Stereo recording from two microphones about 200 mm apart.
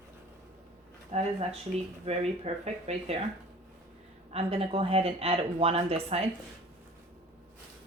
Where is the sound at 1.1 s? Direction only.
35° right (ahead or behind).